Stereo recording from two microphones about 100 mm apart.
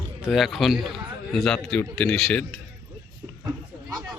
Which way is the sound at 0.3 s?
Centre (ahead or behind).